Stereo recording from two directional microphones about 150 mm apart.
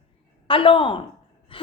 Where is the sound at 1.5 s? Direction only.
35° left (ahead or behind).